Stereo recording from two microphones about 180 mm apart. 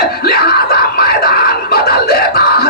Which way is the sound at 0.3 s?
60° left (ahead or behind).